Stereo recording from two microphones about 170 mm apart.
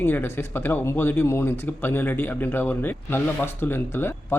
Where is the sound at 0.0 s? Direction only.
15° left (ahead or behind).